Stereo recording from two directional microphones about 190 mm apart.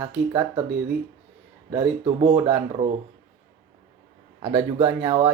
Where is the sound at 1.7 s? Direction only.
20° right (ahead or behind).